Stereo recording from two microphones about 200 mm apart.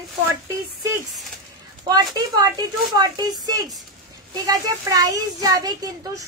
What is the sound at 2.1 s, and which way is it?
Speech, 20° right (ahead or behind).